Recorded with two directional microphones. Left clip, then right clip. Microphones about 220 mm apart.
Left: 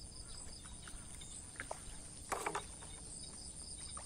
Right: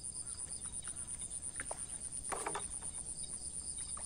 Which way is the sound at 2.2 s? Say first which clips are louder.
Left 1 dB; 20° left (ahead or behind).